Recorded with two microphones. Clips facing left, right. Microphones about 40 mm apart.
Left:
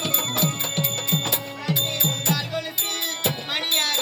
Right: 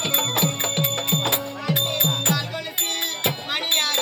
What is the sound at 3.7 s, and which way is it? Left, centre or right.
Wind chime, centre.